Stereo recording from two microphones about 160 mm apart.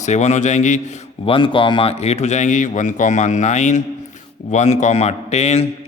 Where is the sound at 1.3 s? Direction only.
30° left (ahead or behind).